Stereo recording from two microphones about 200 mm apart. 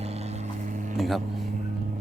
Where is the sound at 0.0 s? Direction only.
30° right (ahead or behind).